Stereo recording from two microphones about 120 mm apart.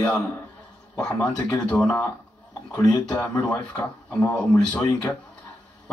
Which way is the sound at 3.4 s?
10° left (ahead or behind).